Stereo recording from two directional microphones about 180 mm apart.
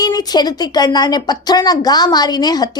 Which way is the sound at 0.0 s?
20° left (ahead or behind).